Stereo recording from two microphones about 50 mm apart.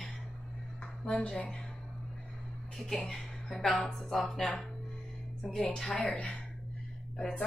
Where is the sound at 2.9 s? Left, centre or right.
Centre.